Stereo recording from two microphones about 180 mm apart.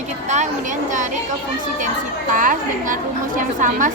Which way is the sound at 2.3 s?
45° right (ahead or behind).